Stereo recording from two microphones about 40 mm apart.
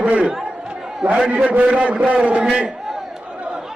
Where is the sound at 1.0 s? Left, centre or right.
Right.